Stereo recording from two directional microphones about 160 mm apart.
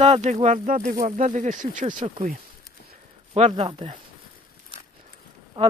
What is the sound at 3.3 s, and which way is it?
Speech, 40° right (ahead or behind).